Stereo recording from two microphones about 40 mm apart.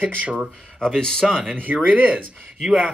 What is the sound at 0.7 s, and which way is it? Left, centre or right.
Speech, centre.